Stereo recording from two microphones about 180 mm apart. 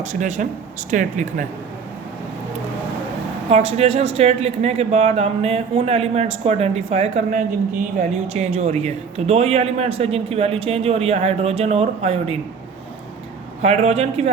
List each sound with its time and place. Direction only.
0.0 s speech: 40° right (ahead or behind)
3.5 s speech: 35° right (ahead or behind)
13.6 s speech: 35° right (ahead or behind)